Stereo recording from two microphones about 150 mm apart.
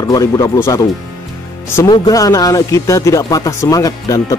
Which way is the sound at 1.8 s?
25° left (ahead or behind).